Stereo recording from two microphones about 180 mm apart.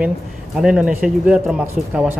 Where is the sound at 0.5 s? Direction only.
5° right (ahead or behind).